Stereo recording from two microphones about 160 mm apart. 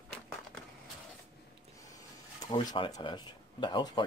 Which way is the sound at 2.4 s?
25° left (ahead or behind).